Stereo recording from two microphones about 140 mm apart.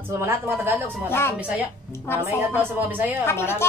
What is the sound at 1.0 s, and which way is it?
Speech, 15° left (ahead or behind).